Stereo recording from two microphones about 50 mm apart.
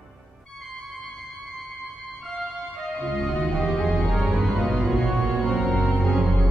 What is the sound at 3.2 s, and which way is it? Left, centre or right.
Music, centre.